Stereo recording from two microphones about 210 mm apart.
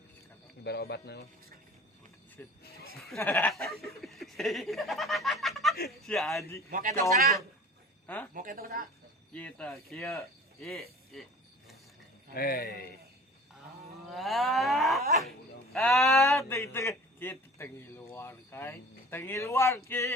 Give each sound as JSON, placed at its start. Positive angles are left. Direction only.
{"t": 0.6, "sound": "speech", "side_deg": 50}
{"t": 2.4, "sound": "a sound", "side_deg": 10}
{"t": 4.0, "sound": "snicker", "side_deg": 0}
{"t": 5.9, "sound": "moo", "side_deg": 0}
{"t": 6.7, "sound": "a man's voice", "side_deg": -45}
{"t": 8.0, "sound": "speech", "side_deg": 5}
{"t": 8.3, "sound": "a woman's voice", "side_deg": -40}
{"t": 9.3, "sound": "moo", "side_deg": 5}
{"t": 10.2, "sound": "speech", "side_deg": 0}
{"t": 12.3, "sound": "speech", "side_deg": 45}
{"t": 14.1, "sound": "moo", "side_deg": 0}
{"t": 16.2, "sound": "a man's voice", "side_deg": 15}
{"t": 19.9, "sound": "a sound", "side_deg": 15}